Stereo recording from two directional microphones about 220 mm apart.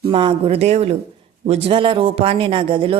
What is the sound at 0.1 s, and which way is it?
A woman's voice, 25° right (ahead or behind).